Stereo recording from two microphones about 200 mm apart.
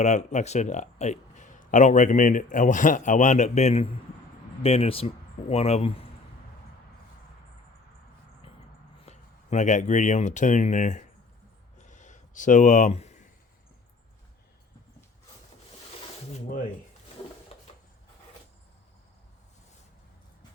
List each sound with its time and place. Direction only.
0.0 s speech: 35° left (ahead or behind)
9.0 s speech: 35° left (ahead or behind)
11.8 s a sound: 35° left (ahead or behind)
17.5 s sewing machine: 30° left (ahead or behind)